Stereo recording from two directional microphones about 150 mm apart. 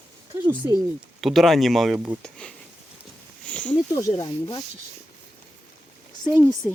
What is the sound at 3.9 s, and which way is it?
Speech, 25° left (ahead or behind).